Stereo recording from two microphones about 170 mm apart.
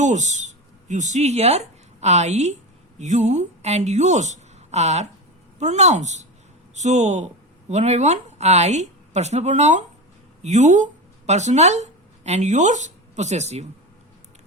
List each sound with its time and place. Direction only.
0.0 s a woman's voice: 45° right (ahead or behind)